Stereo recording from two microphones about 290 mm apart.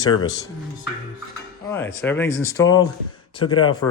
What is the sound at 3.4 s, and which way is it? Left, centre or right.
Speech, left.